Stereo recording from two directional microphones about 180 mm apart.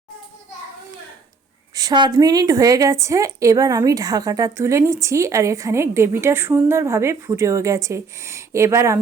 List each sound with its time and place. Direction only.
1.7 s a woman's voice: 20° right (ahead or behind)